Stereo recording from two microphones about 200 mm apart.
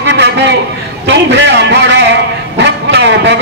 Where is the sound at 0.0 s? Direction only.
60° right (ahead or behind).